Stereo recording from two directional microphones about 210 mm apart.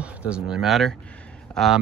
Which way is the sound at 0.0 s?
5° right (ahead or behind).